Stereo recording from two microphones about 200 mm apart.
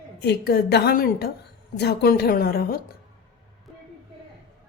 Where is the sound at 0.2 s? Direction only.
55° left (ahead or behind).